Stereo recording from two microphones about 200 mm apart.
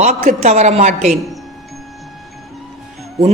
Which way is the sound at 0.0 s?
35° right (ahead or behind).